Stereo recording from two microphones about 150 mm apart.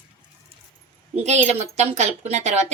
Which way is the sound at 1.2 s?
50° right (ahead or behind).